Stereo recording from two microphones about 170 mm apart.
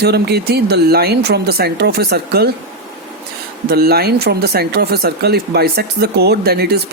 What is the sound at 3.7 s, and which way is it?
Speech, 65° right (ahead or behind).